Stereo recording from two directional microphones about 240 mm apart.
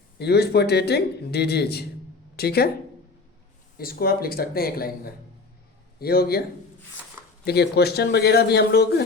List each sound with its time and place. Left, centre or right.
0.2 s a man's voice: left
3.8 s speech: left
6.0 s speech: left
7.4 s a man's voice: left